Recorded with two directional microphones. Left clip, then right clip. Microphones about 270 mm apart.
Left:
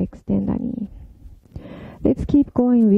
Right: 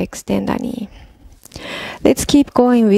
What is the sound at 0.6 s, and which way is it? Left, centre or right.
Speech, right.